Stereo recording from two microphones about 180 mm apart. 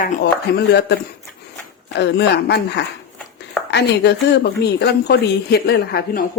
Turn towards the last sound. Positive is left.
turn(degrees=60)  # may be behind; listen again after turning